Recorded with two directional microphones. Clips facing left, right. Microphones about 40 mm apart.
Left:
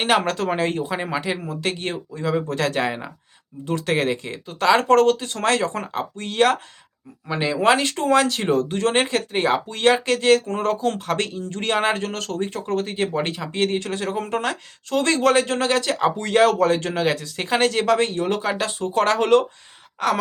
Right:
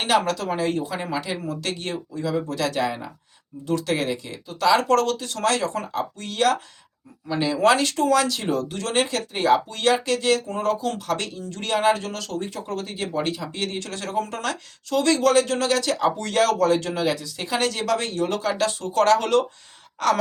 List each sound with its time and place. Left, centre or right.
0.0 s speech: left
20.0 s speech: centre